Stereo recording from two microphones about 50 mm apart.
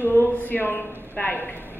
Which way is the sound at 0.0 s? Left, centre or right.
Left.